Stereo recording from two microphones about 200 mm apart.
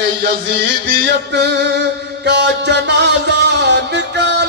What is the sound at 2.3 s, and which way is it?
Music, 60° right (ahead or behind).